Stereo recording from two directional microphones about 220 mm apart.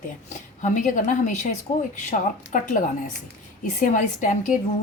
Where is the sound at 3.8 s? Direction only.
35° left (ahead or behind).